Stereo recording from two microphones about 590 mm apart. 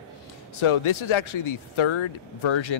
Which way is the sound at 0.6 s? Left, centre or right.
Left.